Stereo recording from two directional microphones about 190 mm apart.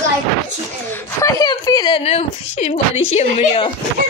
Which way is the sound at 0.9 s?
15° left (ahead or behind).